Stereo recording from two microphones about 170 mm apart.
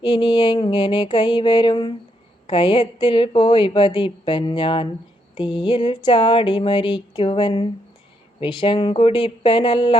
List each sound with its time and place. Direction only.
0.0 s a woman's voice: 25° left (ahead or behind)